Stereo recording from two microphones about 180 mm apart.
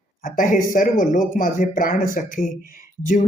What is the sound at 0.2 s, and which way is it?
Speech, 50° left (ahead or behind).